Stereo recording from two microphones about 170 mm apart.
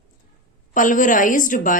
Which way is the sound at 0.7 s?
50° left (ahead or behind).